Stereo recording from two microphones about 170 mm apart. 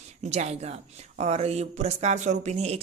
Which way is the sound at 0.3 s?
40° right (ahead or behind).